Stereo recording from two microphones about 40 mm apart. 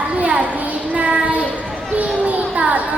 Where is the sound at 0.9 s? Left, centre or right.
Right.